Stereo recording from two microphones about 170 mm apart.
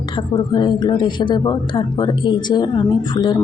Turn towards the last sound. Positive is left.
turn(degrees=25)  # may be behind; listen again after turning